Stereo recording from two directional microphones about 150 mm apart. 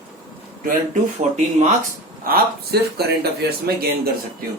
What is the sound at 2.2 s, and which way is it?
Speech, 90° right.